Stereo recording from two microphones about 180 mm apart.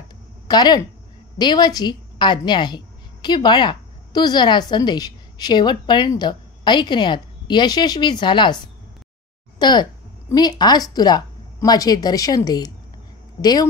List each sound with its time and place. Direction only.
0.5 s a woman's voice: 25° left (ahead or behind)
9.6 s a woman's voice: 25° left (ahead or behind)